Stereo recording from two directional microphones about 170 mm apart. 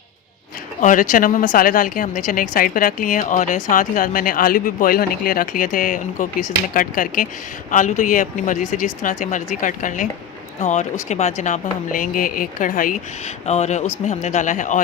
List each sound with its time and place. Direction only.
0.8 s a woman's voice: 50° left (ahead or behind)